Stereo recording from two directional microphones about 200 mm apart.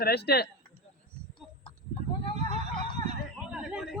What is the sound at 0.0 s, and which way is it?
Speech, 50° left (ahead or behind).